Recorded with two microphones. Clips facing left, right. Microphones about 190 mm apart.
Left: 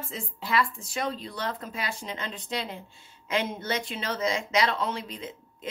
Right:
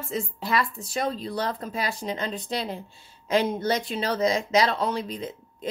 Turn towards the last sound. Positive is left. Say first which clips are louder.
# right 5 dB
turn(degrees=-35)  # may be behind; listen again after turning